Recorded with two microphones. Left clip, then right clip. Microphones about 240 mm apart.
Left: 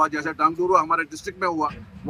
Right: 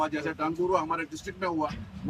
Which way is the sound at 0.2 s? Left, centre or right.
Centre.